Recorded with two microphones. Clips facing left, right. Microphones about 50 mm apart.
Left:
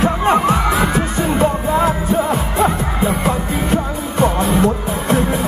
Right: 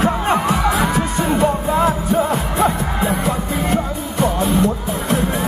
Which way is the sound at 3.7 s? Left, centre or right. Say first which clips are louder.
Left 2 dB; left.